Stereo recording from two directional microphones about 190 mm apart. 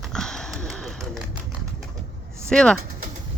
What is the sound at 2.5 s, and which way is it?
Speech, 5° left (ahead or behind).